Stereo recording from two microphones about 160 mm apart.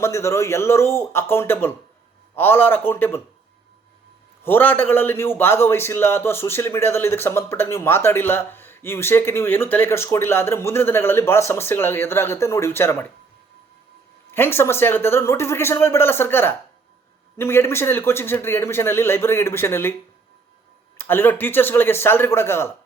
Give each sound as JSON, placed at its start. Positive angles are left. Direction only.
{"t": 0.0, "sound": "a man's voice", "side_deg": 15}
{"t": 4.4, "sound": "a man's voice", "side_deg": 10}
{"t": 14.3, "sound": "a man's voice", "side_deg": 15}
{"t": 21.0, "sound": "a man's voice", "side_deg": 15}